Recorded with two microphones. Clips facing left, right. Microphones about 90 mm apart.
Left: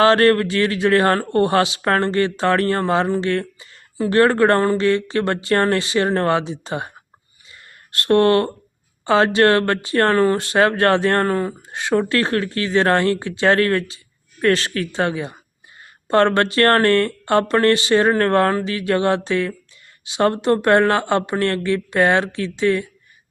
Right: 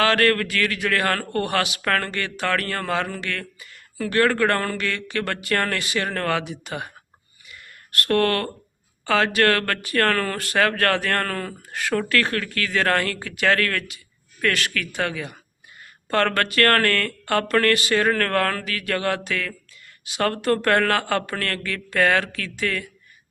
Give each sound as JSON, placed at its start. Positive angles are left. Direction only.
{"t": 0.0, "sound": "a man's voice", "side_deg": 30}
{"t": 7.4, "sound": "a sound", "side_deg": 25}
{"t": 9.0, "sound": "a man's voice", "side_deg": 25}